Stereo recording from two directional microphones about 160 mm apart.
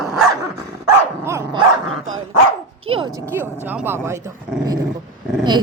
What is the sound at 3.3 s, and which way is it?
Speech, 10° right (ahead or behind).